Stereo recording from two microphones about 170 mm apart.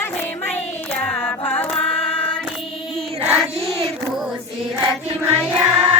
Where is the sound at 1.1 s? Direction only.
15° left (ahead or behind).